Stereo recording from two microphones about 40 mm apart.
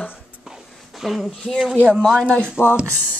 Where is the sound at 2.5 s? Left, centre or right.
Left.